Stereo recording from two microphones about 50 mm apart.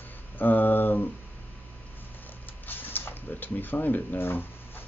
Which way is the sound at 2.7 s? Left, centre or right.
Left.